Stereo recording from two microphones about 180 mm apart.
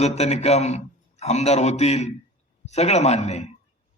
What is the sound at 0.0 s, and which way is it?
A man's voice, 35° left (ahead or behind).